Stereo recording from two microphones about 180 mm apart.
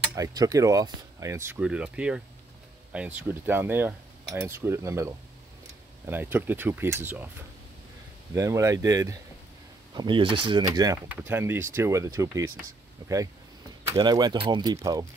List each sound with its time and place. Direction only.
0.1 s speech: 20° right (ahead or behind)
1.6 s speech: 5° right (ahead or behind)
8.4 s speech: 15° right (ahead or behind)